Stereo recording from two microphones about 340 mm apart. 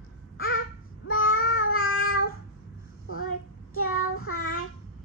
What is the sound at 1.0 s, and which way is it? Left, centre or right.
Child singing, left.